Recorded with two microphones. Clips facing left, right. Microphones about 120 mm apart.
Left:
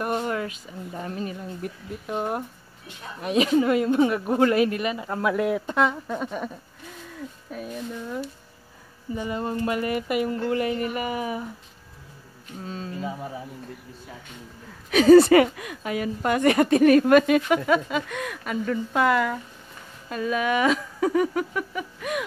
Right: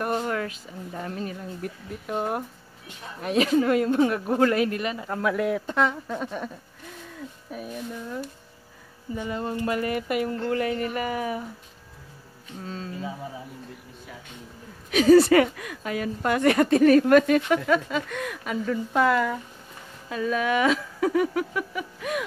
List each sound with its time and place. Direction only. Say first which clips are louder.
0.0 s a sound: even; centre (ahead or behind)
0.3 s a woman's voice: even; 10° left (ahead or behind)
2.1 s speech: even; 5° right (ahead or behind)
3.2 s a woman's voice: left 1 dB; 5° left (ahead or behind)
7.5 s speech: left 1 dB; 5° right (ahead or behind)
9.1 s a woman's voice: left 1 dB; 20° left (ahead or behind)
14.9 s speech: left 3 dB; 60° left (ahead or behind)
15.5 s a woman's voice: left 1 dB; 10° left (ahead or behind)